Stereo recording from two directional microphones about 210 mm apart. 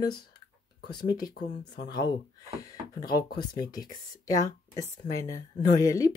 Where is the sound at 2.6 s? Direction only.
20° left (ahead or behind).